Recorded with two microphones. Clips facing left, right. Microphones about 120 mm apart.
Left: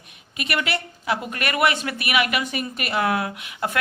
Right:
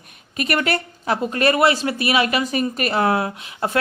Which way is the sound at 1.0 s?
30° right (ahead or behind).